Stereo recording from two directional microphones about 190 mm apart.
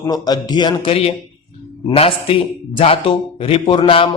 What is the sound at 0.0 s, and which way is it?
Speech, 20° left (ahead or behind).